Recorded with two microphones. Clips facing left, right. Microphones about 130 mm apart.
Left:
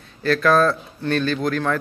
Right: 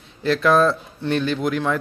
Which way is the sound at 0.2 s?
20° right (ahead or behind).